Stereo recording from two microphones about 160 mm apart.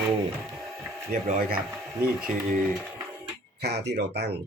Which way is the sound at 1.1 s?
60° right (ahead or behind).